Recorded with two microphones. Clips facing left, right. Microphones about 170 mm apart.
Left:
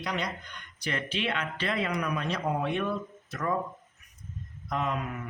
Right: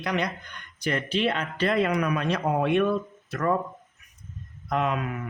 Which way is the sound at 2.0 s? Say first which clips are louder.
Right 5 dB; 65° right (ahead or behind).